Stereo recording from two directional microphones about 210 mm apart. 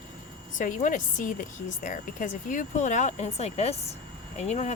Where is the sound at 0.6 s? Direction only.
40° left (ahead or behind).